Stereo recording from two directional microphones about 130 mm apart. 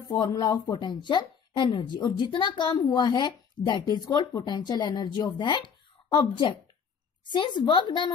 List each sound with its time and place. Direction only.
0.2 s speech: 25° left (ahead or behind)